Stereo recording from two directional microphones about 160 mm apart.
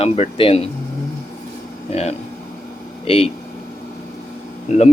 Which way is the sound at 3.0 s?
40° left (ahead or behind).